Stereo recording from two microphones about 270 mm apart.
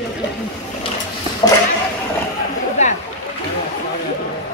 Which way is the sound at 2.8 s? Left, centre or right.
Left.